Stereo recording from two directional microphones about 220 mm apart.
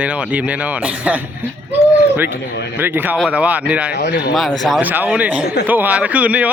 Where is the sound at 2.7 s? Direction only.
10° right (ahead or behind).